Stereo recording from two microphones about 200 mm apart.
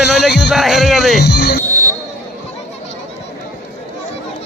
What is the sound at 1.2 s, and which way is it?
Music, 55° left (ahead or behind).